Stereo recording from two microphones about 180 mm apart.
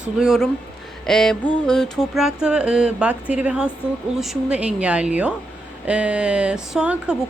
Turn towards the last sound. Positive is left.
turn(degrees=-5)  # may be behind; listen again after turning